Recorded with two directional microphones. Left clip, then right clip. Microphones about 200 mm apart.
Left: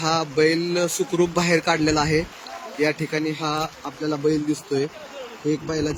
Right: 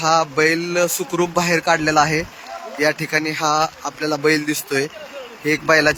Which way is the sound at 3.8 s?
30° right (ahead or behind).